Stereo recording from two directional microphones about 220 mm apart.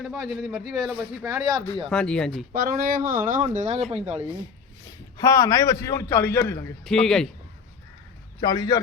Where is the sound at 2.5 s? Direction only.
40° right (ahead or behind).